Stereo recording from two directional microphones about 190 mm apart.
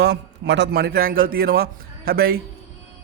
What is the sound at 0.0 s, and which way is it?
A man's voice, 65° right (ahead or behind).